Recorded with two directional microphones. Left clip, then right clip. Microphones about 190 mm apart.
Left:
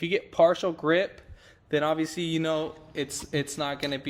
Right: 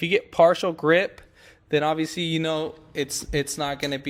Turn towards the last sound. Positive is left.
turn(degrees=-35)  # may be behind; listen again after turning